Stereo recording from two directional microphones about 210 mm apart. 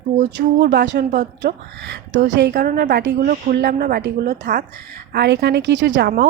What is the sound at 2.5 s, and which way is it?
A woman's voice, 40° right (ahead or behind).